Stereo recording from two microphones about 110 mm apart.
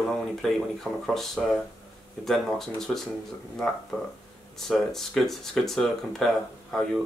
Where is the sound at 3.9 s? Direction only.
15° left (ahead or behind).